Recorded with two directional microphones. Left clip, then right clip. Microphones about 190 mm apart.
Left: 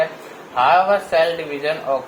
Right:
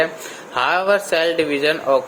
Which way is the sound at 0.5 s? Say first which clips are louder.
Left 2 dB; 55° right (ahead or behind).